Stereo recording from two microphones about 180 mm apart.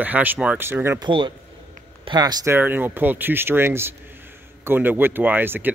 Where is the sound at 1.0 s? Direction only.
25° right (ahead or behind).